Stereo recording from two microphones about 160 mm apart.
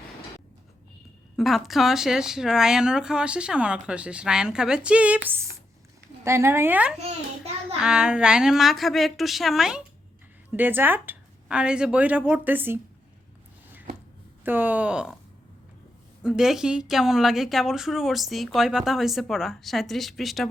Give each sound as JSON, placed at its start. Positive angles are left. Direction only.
{"t": 1.4, "sound": "speech", "side_deg": 0}
{"t": 14.4, "sound": "speech", "side_deg": -10}
{"t": 16.2, "sound": "speech", "side_deg": -5}